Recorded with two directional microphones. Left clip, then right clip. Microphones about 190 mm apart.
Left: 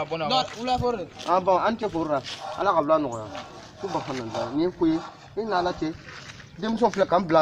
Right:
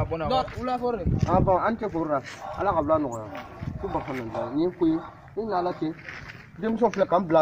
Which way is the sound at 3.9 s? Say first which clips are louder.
Left 1 dB; 25° left (ahead or behind).